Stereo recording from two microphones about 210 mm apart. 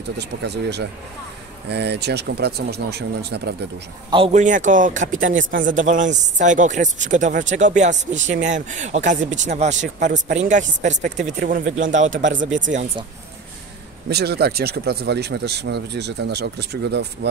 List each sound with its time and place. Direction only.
0.2 s speech: 50° right (ahead or behind)
4.1 s speech: 30° right (ahead or behind)
5.3 s speech: 60° right (ahead or behind)
5.6 s speech: 40° right (ahead or behind)
14.0 s speech: 50° right (ahead or behind)